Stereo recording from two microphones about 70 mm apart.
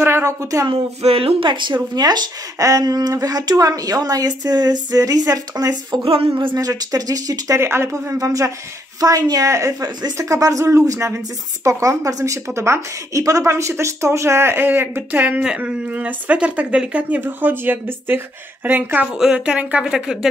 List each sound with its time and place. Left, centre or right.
0.0 s a sound: right
2.0 s speech: right
2.6 s speech: right
7.5 s speech: right
12.5 s speech: right
15.4 s speech: centre
19.1 s speech: centre